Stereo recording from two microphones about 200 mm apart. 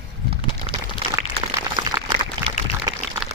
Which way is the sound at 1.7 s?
25° right (ahead or behind).